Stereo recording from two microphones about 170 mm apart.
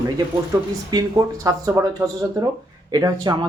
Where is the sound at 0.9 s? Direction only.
25° right (ahead or behind).